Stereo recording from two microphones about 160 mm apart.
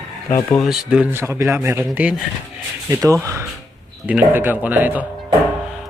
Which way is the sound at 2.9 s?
20° right (ahead or behind).